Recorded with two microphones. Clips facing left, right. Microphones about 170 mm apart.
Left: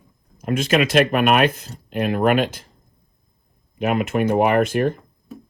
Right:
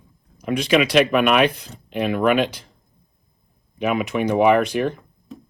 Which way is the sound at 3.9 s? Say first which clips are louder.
Left 1 dB; 50° left (ahead or behind).